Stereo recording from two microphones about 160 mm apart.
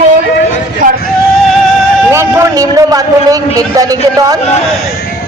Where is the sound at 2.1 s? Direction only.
15° right (ahead or behind).